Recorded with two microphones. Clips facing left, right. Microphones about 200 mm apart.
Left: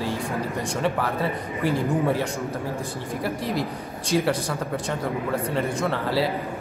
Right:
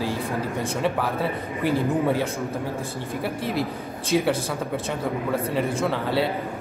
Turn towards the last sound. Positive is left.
turn(degrees=0)  # may be behind; listen again after turning